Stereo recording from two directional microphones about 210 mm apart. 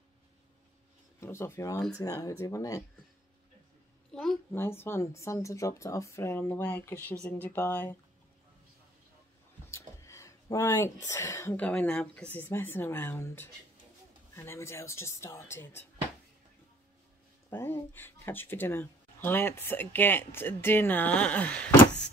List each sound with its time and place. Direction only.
1.2 s speech: 10° left (ahead or behind)
4.1 s a child's voice: centre (ahead or behind)
9.7 s a sound: 15° left (ahead or behind)
11.1 s speech: 15° left (ahead or behind)
17.5 s speech: 10° left (ahead or behind)